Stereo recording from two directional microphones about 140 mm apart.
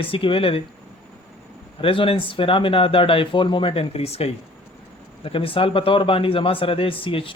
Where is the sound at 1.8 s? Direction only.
40° left (ahead or behind).